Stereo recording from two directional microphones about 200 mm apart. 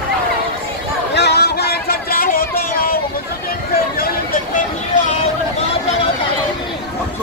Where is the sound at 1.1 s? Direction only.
55° left (ahead or behind).